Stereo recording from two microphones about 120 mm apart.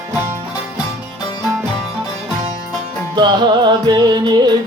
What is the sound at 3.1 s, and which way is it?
Music, 40° right (ahead or behind).